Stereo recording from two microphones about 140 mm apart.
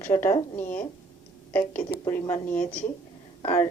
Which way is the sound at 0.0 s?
15° left (ahead or behind).